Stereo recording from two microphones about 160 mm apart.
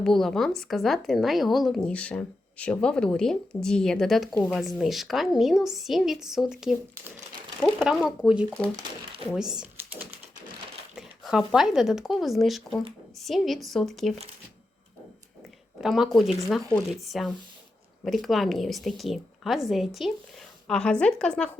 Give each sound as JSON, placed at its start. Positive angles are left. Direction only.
{"t": 0.0, "sound": "a woman's voice", "side_deg": 0}
{"t": 8.7, "sound": "speech", "side_deg": -30}
{"t": 9.3, "sound": "a woman's voice", "side_deg": -5}
{"t": 15.8, "sound": "a woman's voice", "side_deg": 0}